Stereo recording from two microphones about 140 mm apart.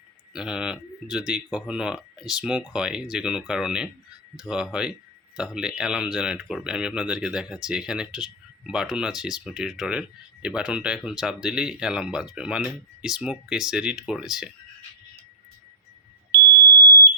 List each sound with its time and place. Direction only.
0.3 s speech: 5° right (ahead or behind)